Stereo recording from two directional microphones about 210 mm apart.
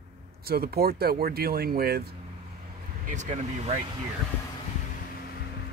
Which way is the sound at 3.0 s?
35° right (ahead or behind).